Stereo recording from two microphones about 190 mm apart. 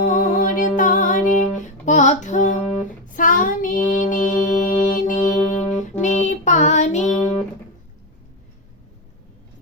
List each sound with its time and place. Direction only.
0.0 s music: 45° left (ahead or behind)
3.2 s child singing: 45° left (ahead or behind)
5.5 s music: 40° left (ahead or behind)